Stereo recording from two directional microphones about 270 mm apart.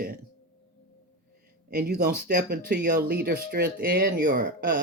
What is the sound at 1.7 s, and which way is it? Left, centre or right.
Speech, right.